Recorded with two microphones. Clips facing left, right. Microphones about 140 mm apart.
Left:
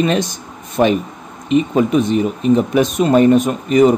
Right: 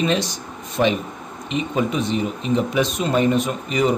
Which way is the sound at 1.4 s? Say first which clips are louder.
Left 8 dB; 50° left (ahead or behind).